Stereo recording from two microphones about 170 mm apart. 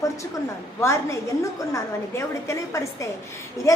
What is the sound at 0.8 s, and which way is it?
A woman's voice, 15° left (ahead or behind).